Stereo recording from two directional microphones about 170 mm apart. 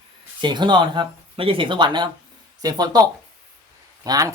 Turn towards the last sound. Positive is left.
turn(degrees=-20)  # may be behind; listen again after turning